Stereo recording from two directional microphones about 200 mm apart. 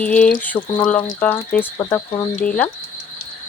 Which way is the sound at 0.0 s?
5° left (ahead or behind).